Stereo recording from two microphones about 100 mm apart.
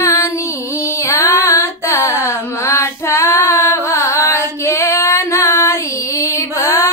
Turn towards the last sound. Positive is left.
turn(degrees=30)  # may be behind; listen again after turning